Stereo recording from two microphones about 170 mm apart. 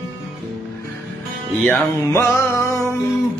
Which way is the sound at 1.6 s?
15° left (ahead or behind).